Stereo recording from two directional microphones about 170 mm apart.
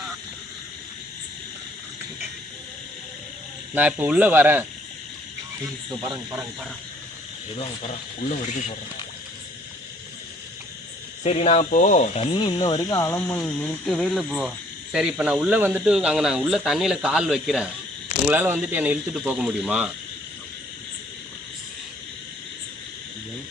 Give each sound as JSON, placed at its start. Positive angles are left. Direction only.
{"t": 3.8, "sound": "speech", "side_deg": -10}
{"t": 7.8, "sound": "speech", "side_deg": 40}
{"t": 11.2, "sound": "speech", "side_deg": 40}
{"t": 13.4, "sound": "speech", "side_deg": 5}